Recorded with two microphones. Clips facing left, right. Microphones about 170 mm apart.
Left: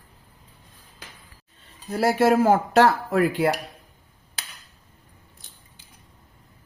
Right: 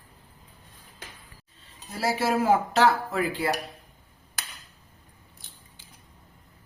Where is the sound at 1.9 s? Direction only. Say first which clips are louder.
Left 7 dB; 55° left (ahead or behind).